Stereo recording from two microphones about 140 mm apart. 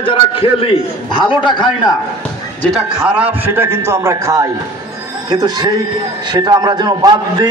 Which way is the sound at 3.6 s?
15° right (ahead or behind).